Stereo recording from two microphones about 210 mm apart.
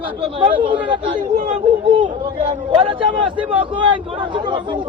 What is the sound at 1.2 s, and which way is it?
Speech, 40° right (ahead or behind).